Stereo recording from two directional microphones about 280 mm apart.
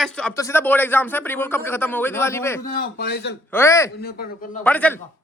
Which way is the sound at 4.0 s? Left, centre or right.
Left.